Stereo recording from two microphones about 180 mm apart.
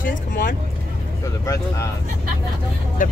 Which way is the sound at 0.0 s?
50° left (ahead or behind).